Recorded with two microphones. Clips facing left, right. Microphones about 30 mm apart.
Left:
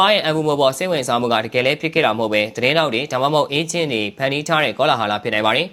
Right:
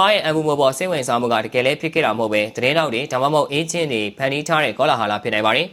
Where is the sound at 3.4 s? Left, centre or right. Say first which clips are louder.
Left 1 dB; left; by 5.6 s centre.